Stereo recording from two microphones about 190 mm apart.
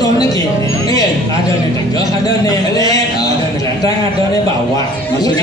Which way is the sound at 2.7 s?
20° left (ahead or behind).